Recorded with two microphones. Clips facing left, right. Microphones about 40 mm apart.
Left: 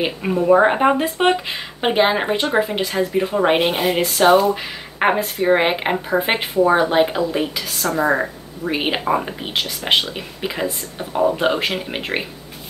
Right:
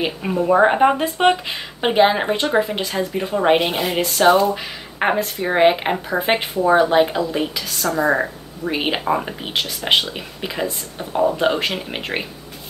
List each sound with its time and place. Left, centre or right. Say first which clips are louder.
0.0 s speech: left 1 dB; centre